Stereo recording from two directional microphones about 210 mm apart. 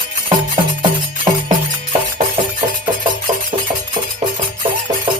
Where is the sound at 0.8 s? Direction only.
25° right (ahead or behind).